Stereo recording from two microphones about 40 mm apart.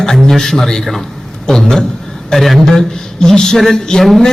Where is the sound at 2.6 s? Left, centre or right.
Centre.